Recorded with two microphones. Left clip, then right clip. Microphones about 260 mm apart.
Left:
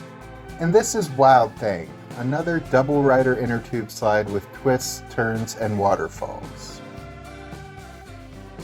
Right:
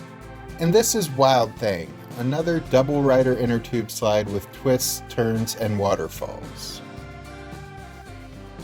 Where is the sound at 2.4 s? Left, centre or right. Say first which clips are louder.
Right 1 dB; right.